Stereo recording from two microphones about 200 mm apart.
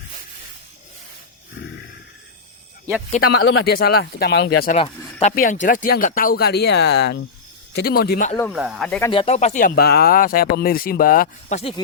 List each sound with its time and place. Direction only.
3.2 s speech: 60° left (ahead or behind)
5.3 s speech: 40° left (ahead or behind)
8.5 s speech: 5° right (ahead or behind)
9.0 s speech: 20° left (ahead or behind)
9.2 s speech: 35° left (ahead or behind)